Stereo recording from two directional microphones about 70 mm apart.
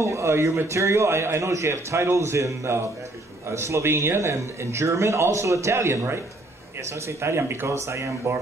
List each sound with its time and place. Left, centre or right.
0.0 s a man's voice: right